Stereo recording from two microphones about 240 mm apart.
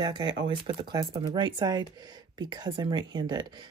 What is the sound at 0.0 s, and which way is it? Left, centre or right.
Speech, centre.